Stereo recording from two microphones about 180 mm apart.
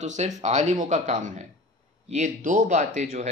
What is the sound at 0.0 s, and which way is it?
Speech, 40° right (ahead or behind).